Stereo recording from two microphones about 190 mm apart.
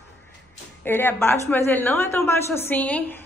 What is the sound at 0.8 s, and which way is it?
A woman's voice, 10° left (ahead or behind).